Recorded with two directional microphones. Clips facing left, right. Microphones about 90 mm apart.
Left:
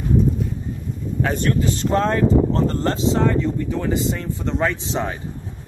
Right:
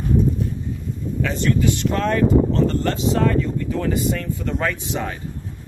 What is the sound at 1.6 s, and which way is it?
Speech, 30° left (ahead or behind).